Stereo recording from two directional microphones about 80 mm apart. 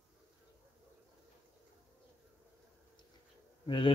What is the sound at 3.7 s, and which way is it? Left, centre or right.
Speech, left.